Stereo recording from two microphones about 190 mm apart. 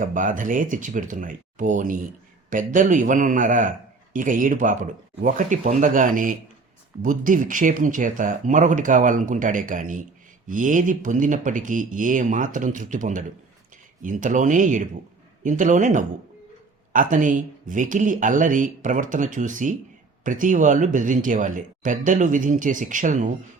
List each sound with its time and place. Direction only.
0.0 s speech: 45° right (ahead or behind)